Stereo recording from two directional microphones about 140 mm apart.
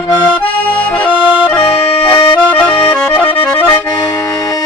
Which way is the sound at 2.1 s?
20° left (ahead or behind).